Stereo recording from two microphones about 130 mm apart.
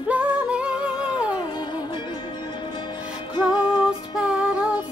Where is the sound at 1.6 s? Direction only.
35° left (ahead or behind).